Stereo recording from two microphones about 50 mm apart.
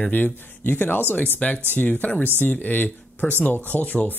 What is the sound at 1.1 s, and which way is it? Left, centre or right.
Speech, left.